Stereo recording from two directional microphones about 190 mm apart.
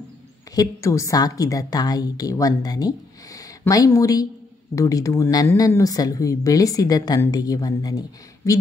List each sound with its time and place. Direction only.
0.6 s a woman's voice: 15° left (ahead or behind)